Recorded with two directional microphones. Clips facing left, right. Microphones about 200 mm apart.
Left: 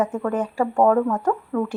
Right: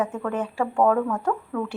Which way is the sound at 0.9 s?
20° left (ahead or behind).